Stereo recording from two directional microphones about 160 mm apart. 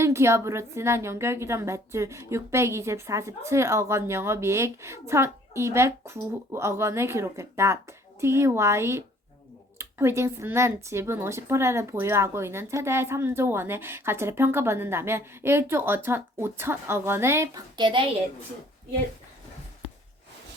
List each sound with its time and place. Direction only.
0.0 s a woman's voice: 15° right (ahead or behind)